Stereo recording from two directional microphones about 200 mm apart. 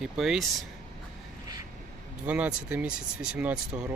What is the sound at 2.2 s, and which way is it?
Speech, 5° right (ahead or behind).